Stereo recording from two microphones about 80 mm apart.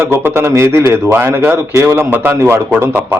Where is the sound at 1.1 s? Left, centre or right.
Right.